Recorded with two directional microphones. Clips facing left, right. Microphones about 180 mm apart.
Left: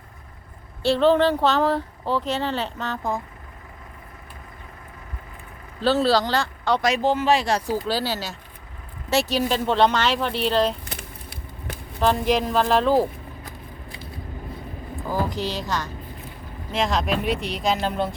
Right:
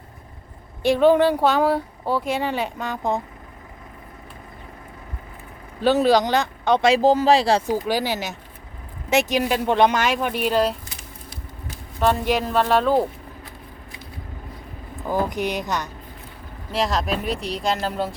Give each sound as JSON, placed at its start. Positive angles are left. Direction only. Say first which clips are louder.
{"t": 0.8, "sound": "speech", "louder": "right 2 dB", "side_deg": -15}
{"t": 5.8, "sound": "speech", "louder": "right 3 dB", "side_deg": -15}
{"t": 7.7, "sound": "speech", "louder": "right 2 dB", "side_deg": -15}
{"t": 10.8, "sound": "a sound", "louder": "left 3 dB", "side_deg": 60}
{"t": 11.9, "sound": "speech", "louder": "even", "side_deg": 0}
{"t": 15.0, "sound": "speech", "louder": "right 3 dB", "side_deg": -20}
{"t": 16.7, "sound": "speech", "louder": "even", "side_deg": 0}